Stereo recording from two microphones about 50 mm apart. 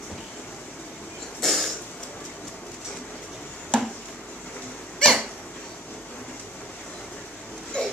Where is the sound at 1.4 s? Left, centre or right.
Centre.